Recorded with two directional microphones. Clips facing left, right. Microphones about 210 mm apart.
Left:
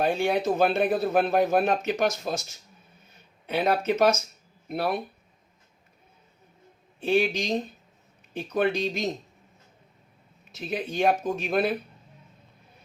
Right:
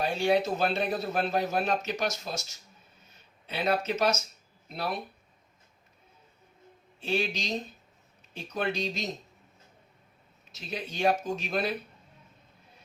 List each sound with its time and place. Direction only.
0.0 s speech: 55° left (ahead or behind)
7.0 s speech: 55° left (ahead or behind)
10.5 s speech: 55° left (ahead or behind)